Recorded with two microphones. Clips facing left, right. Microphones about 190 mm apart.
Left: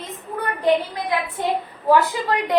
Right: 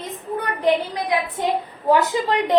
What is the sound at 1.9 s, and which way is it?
Speech, 20° right (ahead or behind).